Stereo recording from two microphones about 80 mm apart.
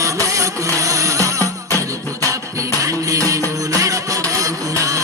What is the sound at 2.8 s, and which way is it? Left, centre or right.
Music, right.